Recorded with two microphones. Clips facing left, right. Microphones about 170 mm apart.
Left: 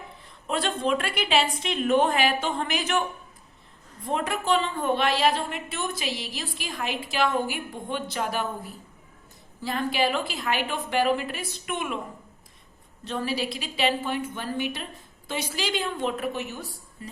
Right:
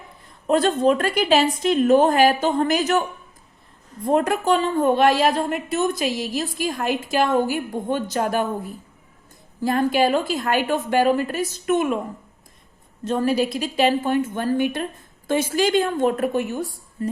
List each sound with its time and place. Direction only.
0.4 s a woman's voice: 40° right (ahead or behind)
4.0 s a woman's voice: 45° right (ahead or behind)
9.6 s a woman's voice: 50° right (ahead or behind)
13.1 s a woman's voice: 45° right (ahead or behind)